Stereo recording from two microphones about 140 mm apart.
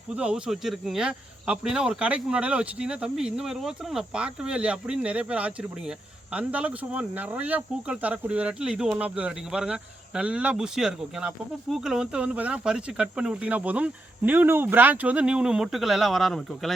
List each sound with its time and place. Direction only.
0.2 s speech: 5° right (ahead or behind)